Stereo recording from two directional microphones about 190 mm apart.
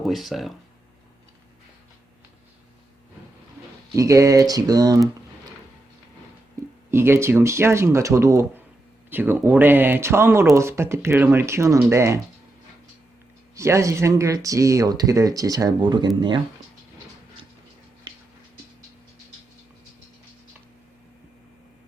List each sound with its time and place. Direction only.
0.0 s speech: centre (ahead or behind)
3.9 s speech: 15° right (ahead or behind)
6.6 s a sound: 15° right (ahead or behind)
6.9 s speech: 10° right (ahead or behind)
13.6 s speech: 15° right (ahead or behind)